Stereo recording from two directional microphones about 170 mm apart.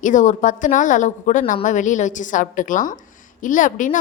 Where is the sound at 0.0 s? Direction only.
45° left (ahead or behind).